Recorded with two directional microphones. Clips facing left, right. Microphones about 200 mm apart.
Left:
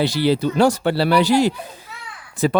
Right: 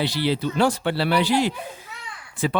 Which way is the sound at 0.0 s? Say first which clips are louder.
Left 5 dB; 40° left (ahead or behind).